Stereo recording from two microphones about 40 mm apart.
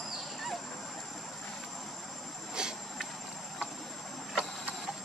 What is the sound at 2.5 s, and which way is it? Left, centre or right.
Insect, centre.